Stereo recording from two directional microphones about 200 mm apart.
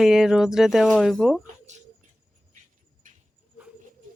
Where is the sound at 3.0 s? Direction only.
40° right (ahead or behind).